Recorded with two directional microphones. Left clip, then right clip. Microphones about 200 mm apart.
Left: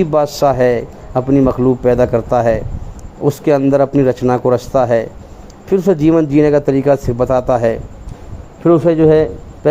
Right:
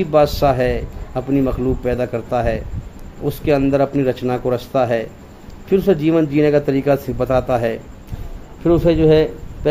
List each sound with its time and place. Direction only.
0.0 s a man's voice: 20° left (ahead or behind)